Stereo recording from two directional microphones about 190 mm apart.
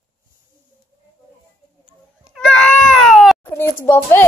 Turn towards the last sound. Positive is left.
turn(degrees=10)  # may be behind; listen again after turning